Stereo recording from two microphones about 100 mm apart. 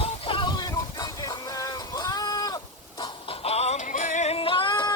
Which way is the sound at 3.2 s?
90° left.